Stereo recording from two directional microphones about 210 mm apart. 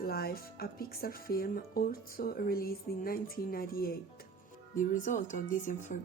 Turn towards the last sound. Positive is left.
turn(degrees=40)  # may be behind; listen again after turning